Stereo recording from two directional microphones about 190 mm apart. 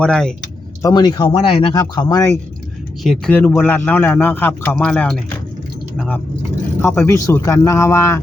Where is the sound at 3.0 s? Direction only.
Centre (ahead or behind).